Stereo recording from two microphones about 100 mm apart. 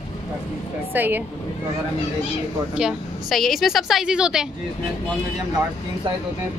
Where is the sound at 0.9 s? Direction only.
20° right (ahead or behind).